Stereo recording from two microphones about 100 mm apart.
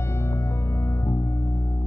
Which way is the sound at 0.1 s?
25° left (ahead or behind).